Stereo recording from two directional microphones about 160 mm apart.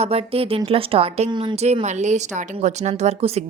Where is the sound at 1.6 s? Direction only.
45° right (ahead or behind).